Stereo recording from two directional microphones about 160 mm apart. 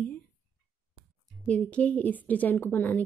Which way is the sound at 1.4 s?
5° left (ahead or behind).